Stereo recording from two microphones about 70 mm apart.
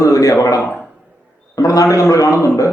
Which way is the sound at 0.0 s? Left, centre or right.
Left.